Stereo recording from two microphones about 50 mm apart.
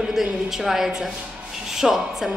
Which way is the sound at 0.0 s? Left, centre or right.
Centre.